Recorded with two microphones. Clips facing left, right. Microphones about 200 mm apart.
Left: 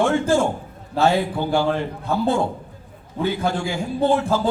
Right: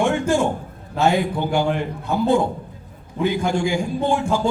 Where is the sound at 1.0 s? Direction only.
15° right (ahead or behind).